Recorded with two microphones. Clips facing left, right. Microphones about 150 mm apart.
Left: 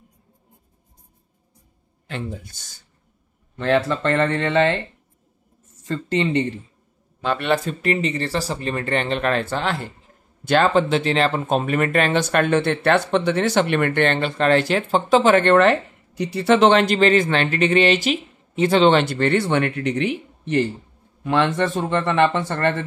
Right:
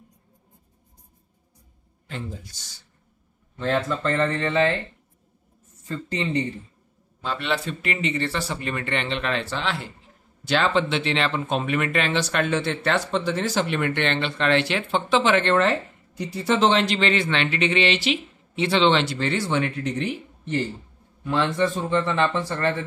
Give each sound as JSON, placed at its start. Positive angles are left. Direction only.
{"t": 2.0, "sound": "speech", "side_deg": 70}
{"t": 3.5, "sound": "a man's voice", "side_deg": 70}
{"t": 7.2, "sound": "speech", "side_deg": 60}
{"t": 15.5, "sound": "a man's voice", "side_deg": 65}